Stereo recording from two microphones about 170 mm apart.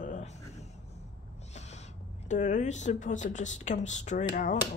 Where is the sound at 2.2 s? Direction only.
45° left (ahead or behind).